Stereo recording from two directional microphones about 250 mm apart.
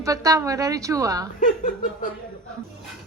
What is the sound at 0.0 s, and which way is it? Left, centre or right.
A woman's voice, centre.